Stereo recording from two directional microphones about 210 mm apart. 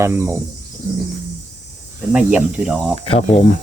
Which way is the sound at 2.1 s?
5° right (ahead or behind).